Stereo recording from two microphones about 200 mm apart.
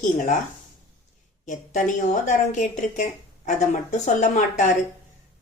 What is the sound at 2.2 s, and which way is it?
Speech, 40° left (ahead or behind).